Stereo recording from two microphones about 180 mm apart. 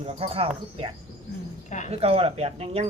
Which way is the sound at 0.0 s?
30° right (ahead or behind).